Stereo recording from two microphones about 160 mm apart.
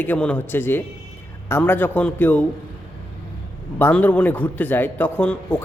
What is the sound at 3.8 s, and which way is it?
Speech, 10° left (ahead or behind).